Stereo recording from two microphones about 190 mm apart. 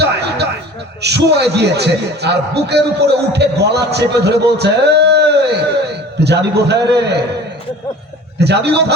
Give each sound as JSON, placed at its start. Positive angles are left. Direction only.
{"t": 0.0, "sound": "a sound", "side_deg": -60}
{"t": 1.0, "sound": "a man's voice", "side_deg": -60}
{"t": 8.4, "sound": "a man's voice", "side_deg": -60}